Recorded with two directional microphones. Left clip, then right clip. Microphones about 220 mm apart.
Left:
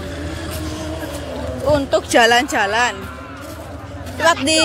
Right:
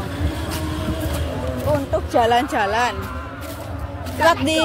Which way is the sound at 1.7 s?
30° left (ahead or behind).